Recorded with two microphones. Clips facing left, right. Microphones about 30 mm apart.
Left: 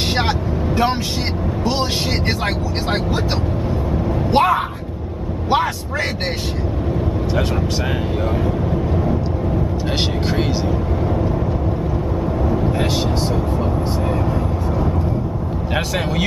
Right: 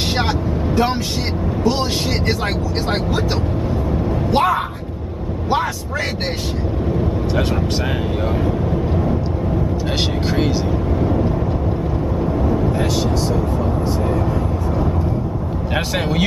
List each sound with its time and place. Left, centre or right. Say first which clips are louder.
1.6 s speech: right 2 dB; left
4.3 s speech: left 2 dB; centre
8.5 s vehicle: even; centre
10.2 s speech: right 1 dB; centre